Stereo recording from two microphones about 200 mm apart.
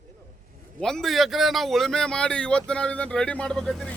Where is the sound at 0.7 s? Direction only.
Centre (ahead or behind).